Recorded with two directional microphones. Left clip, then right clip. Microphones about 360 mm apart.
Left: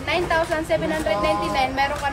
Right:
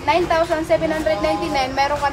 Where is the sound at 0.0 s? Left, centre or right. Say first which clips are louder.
Right 4 dB; centre.